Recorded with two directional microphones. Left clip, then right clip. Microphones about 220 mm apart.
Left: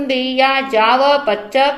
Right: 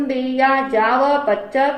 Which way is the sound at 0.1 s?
35° left (ahead or behind).